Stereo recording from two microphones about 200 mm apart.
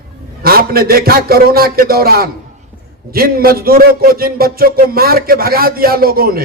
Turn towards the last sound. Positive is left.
turn(degrees=-50)  # may be behind; listen again after turning